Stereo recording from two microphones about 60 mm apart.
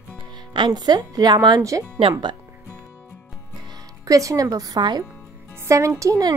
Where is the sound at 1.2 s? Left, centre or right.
Right.